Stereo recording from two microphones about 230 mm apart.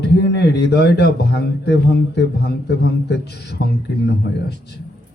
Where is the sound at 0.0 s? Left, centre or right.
Left.